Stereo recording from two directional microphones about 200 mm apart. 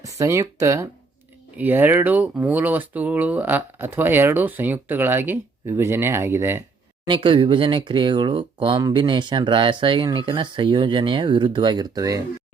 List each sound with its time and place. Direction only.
0.0 s speech: 15° right (ahead or behind)
7.0 s speech: 25° right (ahead or behind)